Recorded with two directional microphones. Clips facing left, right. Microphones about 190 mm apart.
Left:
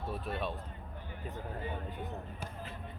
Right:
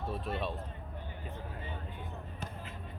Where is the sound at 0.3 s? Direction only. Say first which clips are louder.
Even; centre (ahead or behind).